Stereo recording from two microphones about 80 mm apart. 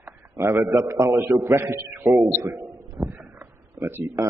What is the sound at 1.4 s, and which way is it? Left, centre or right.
Speech, right.